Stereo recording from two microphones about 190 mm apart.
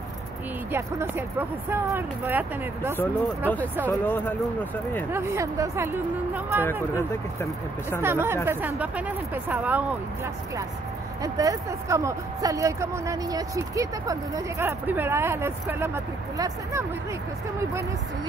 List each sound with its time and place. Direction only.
0.7 s speech: 10° right (ahead or behind)
3.8 s speech: 10° left (ahead or behind)
5.1 s speech: 15° right (ahead or behind)
6.6 s speech: 15° left (ahead or behind)
8.0 s speech: 10° right (ahead or behind)
11.2 s speech: 20° right (ahead or behind)